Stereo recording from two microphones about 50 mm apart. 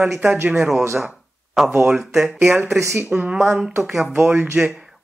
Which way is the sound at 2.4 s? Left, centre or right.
Right.